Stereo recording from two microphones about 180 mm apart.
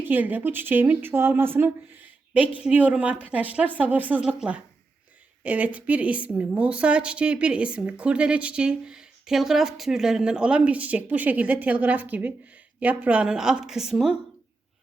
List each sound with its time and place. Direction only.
0.0 s a woman's voice: 10° right (ahead or behind)